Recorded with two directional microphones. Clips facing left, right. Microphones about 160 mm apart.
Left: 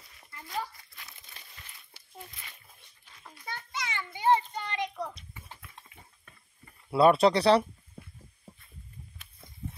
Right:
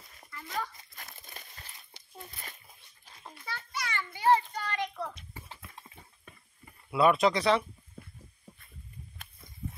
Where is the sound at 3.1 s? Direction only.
35° right (ahead or behind).